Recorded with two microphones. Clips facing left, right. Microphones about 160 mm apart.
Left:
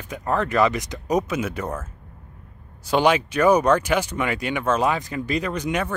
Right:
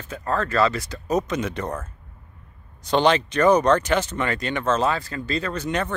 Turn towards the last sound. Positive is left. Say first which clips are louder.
# left 1 dB
turn(degrees=10)  # may be behind; listen again after turning